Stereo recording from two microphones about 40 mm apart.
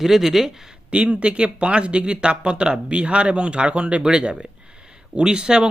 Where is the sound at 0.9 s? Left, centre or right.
Right.